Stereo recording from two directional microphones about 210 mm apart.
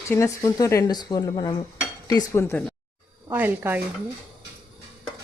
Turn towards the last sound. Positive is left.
turn(degrees=-10)  # may be behind; listen again after turning